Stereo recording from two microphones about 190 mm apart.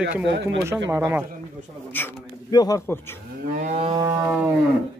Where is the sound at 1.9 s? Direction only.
10° left (ahead or behind).